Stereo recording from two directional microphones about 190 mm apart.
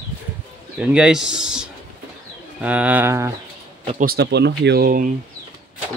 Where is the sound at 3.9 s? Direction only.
50° right (ahead or behind).